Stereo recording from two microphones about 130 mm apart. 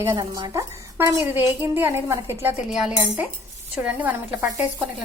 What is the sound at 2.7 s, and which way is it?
Speech, 5° right (ahead or behind).